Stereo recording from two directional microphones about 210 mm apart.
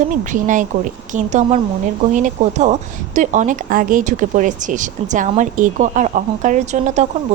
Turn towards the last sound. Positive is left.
turn(degrees=-35)  # may be behind; listen again after turning